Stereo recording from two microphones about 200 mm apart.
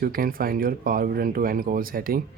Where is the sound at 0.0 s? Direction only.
45° right (ahead or behind).